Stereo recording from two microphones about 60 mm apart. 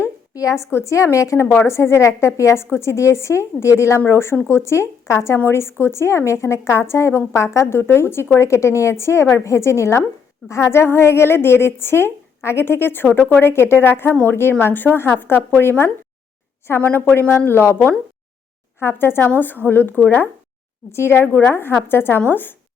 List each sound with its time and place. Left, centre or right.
0.3 s a woman's voice: left
1.6 s a woman's voice: left
16.8 s a woman's voice: left
18.8 s a woman's voice: left
20.9 s a woman's voice: left